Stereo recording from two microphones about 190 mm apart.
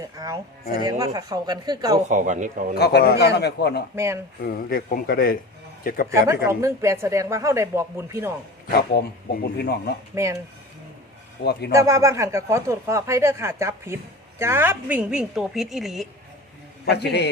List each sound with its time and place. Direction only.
0.0 s a man's voice: 15° right (ahead or behind)
2.0 s speech: 40° right (ahead or behind)
2.7 s a man's voice: 60° left (ahead or behind)
3.9 s speech: 15° right (ahead or behind)
4.4 s speech: 50° left (ahead or behind)
6.2 s speech: 15° right (ahead or behind)
8.7 s a man's voice: 55° left (ahead or behind)
10.2 s speech: 15° right (ahead or behind)
11.7 s speech: 15° right (ahead or behind)
16.8 s a man's voice: 60° left (ahead or behind)